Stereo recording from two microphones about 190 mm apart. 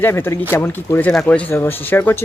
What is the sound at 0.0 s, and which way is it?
Speech, 10° left (ahead or behind).